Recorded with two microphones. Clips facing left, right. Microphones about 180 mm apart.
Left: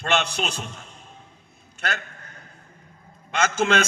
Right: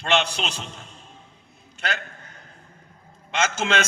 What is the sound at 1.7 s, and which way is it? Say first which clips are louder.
Speech: even; 50° left (ahead or behind).